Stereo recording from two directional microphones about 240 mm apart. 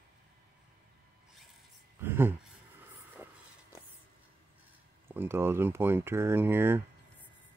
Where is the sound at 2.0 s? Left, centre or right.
Centre.